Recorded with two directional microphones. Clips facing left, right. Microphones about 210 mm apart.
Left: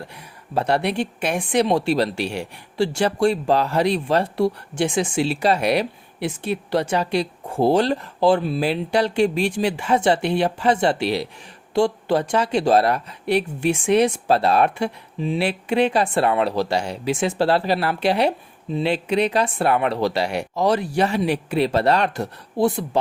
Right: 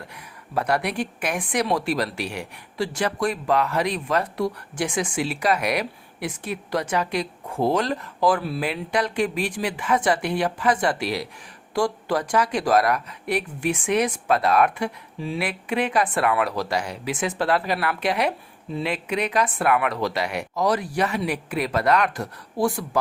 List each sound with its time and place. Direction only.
0.5 s speech: 25° left (ahead or behind)